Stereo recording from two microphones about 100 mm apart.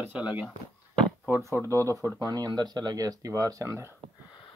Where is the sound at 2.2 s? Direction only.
40° right (ahead or behind).